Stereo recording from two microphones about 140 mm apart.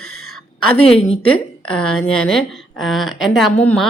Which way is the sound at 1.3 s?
5° left (ahead or behind).